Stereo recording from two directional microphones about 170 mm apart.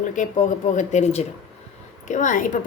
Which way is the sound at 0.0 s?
50° left (ahead or behind).